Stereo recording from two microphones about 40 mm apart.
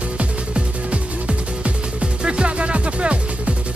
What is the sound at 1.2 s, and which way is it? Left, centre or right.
Music, right.